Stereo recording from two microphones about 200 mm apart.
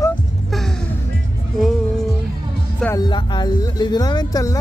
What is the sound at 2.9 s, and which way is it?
Speech, 20° left (ahead or behind).